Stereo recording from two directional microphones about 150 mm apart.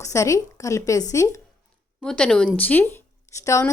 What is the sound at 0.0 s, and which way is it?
Speech, 20° left (ahead or behind).